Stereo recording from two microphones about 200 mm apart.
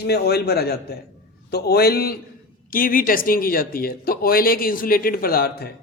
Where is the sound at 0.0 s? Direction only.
55° left (ahead or behind).